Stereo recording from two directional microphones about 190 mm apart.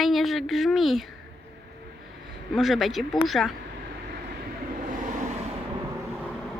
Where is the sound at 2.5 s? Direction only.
Centre (ahead or behind).